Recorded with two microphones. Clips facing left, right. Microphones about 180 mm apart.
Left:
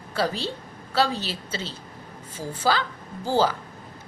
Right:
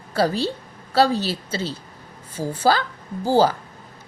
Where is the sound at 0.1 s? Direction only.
40° right (ahead or behind).